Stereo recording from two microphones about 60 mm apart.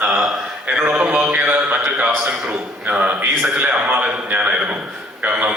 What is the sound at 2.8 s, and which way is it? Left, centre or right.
A man's voice, centre.